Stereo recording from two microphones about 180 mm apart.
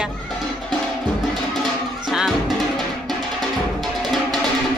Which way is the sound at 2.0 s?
Centre (ahead or behind).